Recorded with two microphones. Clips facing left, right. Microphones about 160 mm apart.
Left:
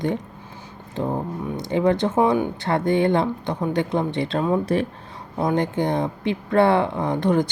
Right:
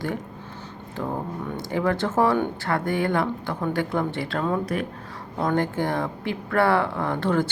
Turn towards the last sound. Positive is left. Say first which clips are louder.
# left 3 dB
turn(degrees=15)  # may be behind; listen again after turning